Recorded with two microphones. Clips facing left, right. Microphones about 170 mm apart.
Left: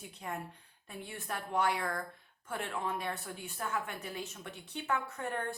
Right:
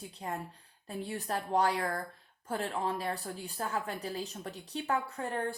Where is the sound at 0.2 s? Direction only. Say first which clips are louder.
Right 2 dB; 35° right (ahead or behind).